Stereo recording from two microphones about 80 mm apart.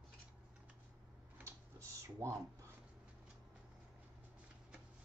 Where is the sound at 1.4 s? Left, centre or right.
Right.